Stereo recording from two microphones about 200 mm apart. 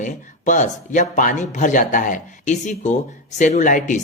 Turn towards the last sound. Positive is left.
turn(degrees=40)  # may be behind; listen again after turning